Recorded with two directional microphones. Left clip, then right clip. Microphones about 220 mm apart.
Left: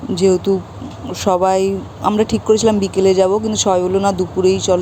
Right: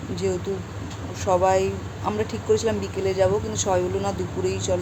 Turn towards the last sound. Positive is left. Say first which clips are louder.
# left 11 dB
turn(degrees=30)  # may be behind; listen again after turning